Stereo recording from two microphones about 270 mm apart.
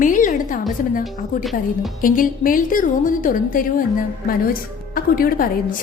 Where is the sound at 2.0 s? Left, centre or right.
Left.